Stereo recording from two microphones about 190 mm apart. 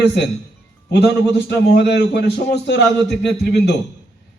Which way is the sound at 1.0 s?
60° left (ahead or behind).